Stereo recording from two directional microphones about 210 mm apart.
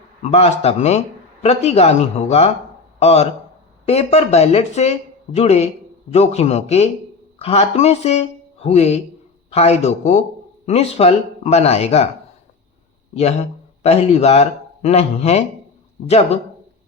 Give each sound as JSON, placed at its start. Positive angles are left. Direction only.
{"t": 0.2, "sound": "a man's voice", "side_deg": 30}
{"t": 13.1, "sound": "a man's voice", "side_deg": 30}